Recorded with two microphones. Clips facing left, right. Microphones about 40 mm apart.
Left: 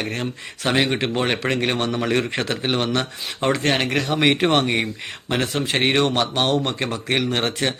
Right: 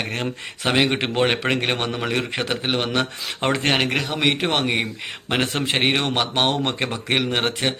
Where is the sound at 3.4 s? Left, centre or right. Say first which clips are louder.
Left 1 dB; right.